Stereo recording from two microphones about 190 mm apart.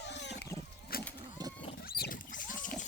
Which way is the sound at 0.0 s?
65° left (ahead or behind).